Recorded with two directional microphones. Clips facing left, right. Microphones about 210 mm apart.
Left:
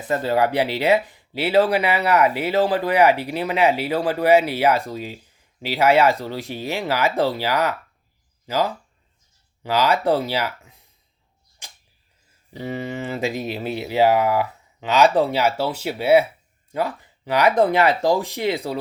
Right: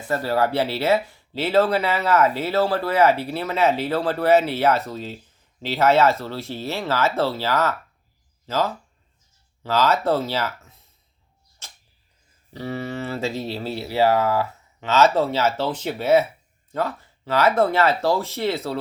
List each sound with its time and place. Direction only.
0.1 s speech: 20° left (ahead or behind)
11.6 s a sound: 15° left (ahead or behind)
12.5 s speech: 15° left (ahead or behind)